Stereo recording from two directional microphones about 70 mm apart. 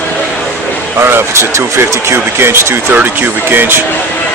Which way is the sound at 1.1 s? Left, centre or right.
Right.